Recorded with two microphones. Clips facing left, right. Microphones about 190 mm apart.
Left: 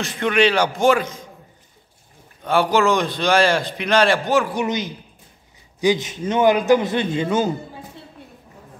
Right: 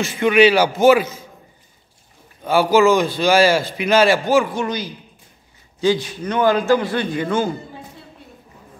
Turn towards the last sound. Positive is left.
turn(degrees=20)  # may be behind; listen again after turning